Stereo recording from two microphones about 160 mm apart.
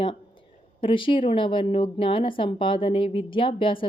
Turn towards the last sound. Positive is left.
turn(degrees=35)  # may be behind; listen again after turning